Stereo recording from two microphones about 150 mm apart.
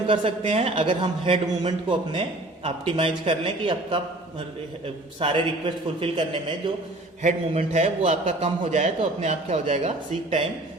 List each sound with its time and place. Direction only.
0.1 s a man's voice: 35° right (ahead or behind)
5.2 s a man's voice: 35° right (ahead or behind)
7.2 s a man's voice: 50° right (ahead or behind)